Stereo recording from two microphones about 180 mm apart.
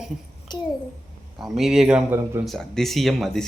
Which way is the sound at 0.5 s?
25° left (ahead or behind).